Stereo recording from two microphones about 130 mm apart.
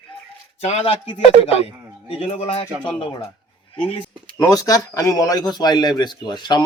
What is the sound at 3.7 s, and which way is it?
Speech, 35° left (ahead or behind).